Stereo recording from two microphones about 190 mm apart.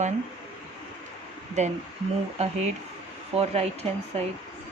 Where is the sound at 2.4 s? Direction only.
35° right (ahead or behind).